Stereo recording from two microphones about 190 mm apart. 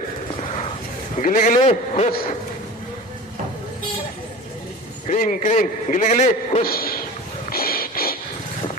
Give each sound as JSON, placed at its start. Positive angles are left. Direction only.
{"t": 1.1, "sound": "a man's voice", "side_deg": 40}
{"t": 5.0, "sound": "a man's voice", "side_deg": 45}
{"t": 7.5, "sound": "a sound", "side_deg": 50}